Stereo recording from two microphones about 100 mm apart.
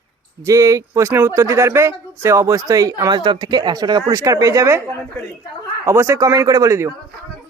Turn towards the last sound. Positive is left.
turn(degrees=-30)  # may be behind; listen again after turning